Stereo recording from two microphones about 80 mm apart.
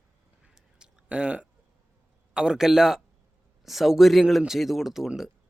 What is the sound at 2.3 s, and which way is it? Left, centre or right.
Speech, centre.